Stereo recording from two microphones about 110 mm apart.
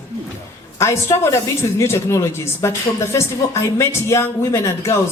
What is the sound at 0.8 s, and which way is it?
A woman's voice, 25° left (ahead or behind).